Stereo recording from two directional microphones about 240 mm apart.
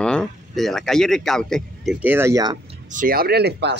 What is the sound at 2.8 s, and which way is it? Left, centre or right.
Speech, right.